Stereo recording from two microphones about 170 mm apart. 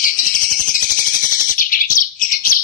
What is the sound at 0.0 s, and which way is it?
Bird, 50° left (ahead or behind).